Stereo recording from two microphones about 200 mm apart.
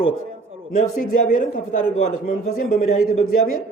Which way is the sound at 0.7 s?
35° left (ahead or behind).